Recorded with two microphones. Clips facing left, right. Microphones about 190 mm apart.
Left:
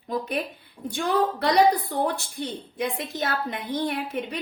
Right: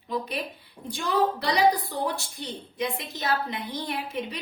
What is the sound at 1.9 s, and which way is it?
A woman's voice, 55° left (ahead or behind).